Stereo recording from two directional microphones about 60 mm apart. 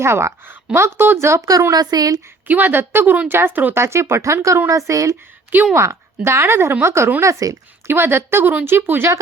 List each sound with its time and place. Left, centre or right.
0.0 s a woman's voice: right
1.4 s a woman's voice: right
2.5 s speech: right
3.8 s a woman's voice: right
6.2 s a woman's voice: right
7.2 s speech: right
7.9 s speech: right